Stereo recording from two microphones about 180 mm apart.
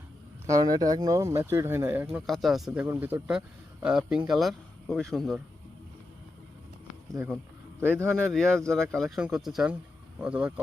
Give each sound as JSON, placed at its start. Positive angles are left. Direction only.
{"t": 0.4, "sound": "speech", "side_deg": -20}
{"t": 2.2, "sound": "speech", "side_deg": 0}
{"t": 2.8, "sound": "speech", "side_deg": -10}
{"t": 7.9, "sound": "speech", "side_deg": 5}